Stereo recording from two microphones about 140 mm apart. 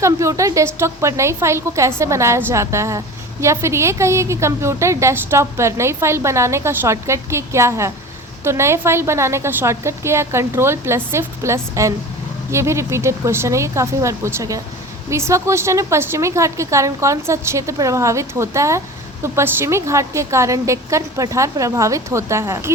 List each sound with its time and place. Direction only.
0.0 s a woman's voice: 20° right (ahead or behind)